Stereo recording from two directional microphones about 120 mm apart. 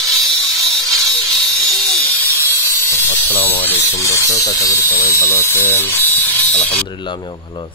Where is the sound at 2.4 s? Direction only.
20° left (ahead or behind).